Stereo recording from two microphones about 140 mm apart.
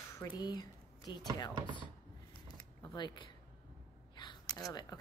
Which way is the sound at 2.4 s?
30° left (ahead or behind).